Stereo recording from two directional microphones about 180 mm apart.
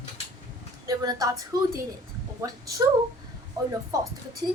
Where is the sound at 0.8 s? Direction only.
20° right (ahead or behind).